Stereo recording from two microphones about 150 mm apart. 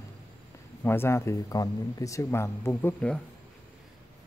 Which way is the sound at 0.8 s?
15° left (ahead or behind).